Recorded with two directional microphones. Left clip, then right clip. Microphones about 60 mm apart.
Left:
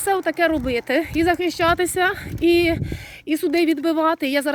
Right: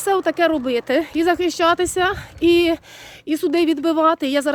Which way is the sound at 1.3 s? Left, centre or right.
Right.